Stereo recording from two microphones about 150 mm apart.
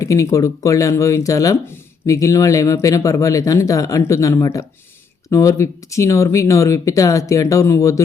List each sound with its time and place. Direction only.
0.0 s speech: 20° left (ahead or behind)